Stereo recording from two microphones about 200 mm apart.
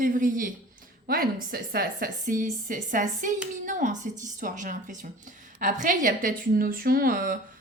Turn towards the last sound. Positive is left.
turn(degrees=-45)  # may be behind; listen again after turning